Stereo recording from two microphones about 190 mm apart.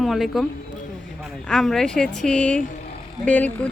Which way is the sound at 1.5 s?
Centre (ahead or behind).